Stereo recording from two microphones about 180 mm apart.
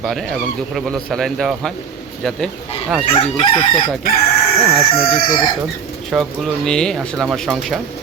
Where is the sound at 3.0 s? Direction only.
30° left (ahead or behind).